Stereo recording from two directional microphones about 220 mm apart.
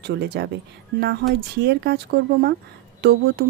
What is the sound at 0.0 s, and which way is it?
Speech, 50° right (ahead or behind).